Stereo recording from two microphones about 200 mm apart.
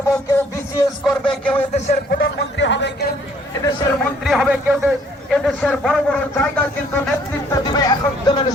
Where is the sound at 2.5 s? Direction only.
65° left (ahead or behind).